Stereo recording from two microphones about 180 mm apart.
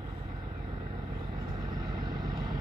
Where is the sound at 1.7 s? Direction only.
20° right (ahead or behind).